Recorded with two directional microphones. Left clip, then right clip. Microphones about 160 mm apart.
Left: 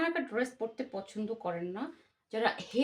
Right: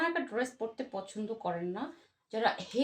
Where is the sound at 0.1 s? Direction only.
15° left (ahead or behind).